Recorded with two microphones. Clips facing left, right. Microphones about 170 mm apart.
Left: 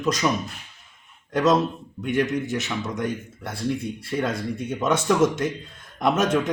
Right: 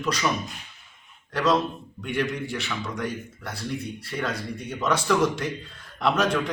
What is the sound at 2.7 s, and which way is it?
Speech, 25° left (ahead or behind).